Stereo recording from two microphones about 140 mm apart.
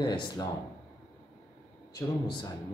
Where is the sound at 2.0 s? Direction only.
30° left (ahead or behind).